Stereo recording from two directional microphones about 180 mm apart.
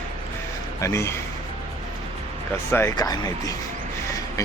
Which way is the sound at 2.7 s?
15° left (ahead or behind).